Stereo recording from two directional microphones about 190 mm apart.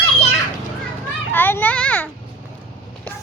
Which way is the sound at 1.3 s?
10° left (ahead or behind).